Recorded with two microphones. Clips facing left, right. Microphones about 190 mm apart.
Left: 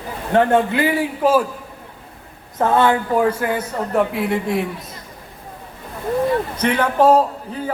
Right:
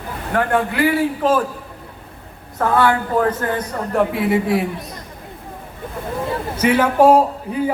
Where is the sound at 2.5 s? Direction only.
20° left (ahead or behind).